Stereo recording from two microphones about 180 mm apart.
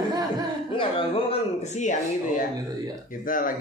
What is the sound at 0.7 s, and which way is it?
Speech, 30° left (ahead or behind).